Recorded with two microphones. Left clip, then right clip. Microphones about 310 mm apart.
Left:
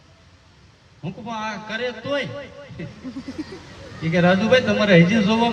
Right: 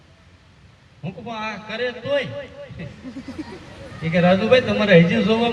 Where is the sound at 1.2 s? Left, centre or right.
Left.